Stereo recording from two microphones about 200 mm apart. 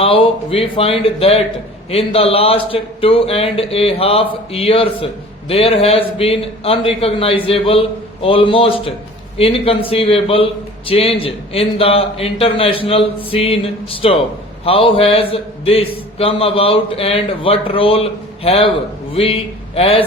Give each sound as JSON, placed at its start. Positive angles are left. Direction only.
{"t": 0.0, "sound": "a man's voice", "side_deg": 30}